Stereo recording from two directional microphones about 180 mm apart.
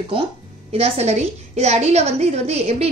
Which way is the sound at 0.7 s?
35° right (ahead or behind).